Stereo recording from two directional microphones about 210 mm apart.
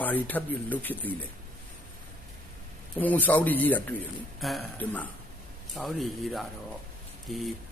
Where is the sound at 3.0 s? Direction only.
10° left (ahead or behind).